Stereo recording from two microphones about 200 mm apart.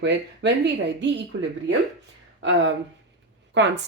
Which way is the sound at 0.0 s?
60° right (ahead or behind).